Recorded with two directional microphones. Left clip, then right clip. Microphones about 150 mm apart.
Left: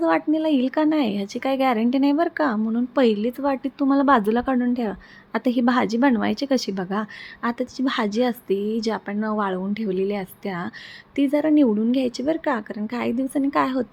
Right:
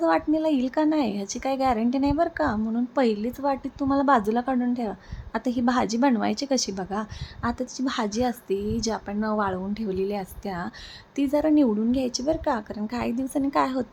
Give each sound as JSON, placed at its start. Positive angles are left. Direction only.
{"t": 0.0, "sound": "a woman's voice", "side_deg": 15}